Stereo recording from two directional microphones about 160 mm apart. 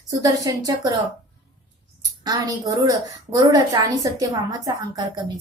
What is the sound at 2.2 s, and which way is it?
A woman's voice, 25° right (ahead or behind).